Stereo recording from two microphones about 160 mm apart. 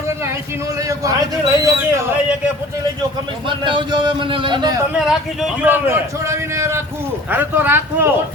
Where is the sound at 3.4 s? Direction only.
30° right (ahead or behind).